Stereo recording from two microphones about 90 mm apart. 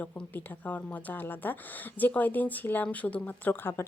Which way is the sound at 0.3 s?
20° left (ahead or behind).